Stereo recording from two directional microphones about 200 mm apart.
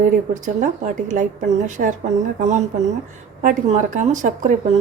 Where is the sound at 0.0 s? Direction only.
40° right (ahead or behind).